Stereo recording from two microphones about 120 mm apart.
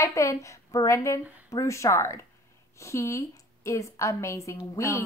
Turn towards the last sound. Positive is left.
turn(degrees=25)  # may be behind; listen again after turning